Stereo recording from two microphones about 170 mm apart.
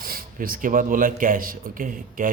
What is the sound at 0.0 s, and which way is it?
Speech, 55° right (ahead or behind).